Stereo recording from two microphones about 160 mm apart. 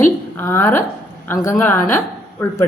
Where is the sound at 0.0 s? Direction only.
15° left (ahead or behind).